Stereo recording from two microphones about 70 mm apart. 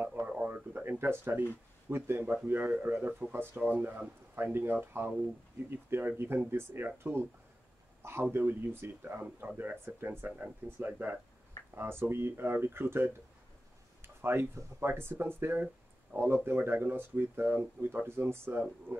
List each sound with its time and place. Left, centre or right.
0.3 s speech: right